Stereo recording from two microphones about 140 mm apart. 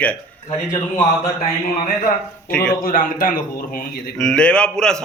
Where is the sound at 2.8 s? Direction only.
90° left.